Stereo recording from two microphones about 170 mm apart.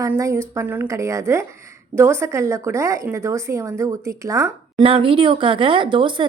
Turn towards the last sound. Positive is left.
turn(degrees=-30)  # may be behind; listen again after turning